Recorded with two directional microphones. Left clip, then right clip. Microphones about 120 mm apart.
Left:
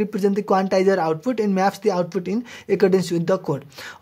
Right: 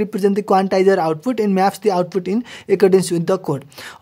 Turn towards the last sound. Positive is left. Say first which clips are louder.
# right 2 dB
turn(degrees=-50)  # may be behind; listen again after turning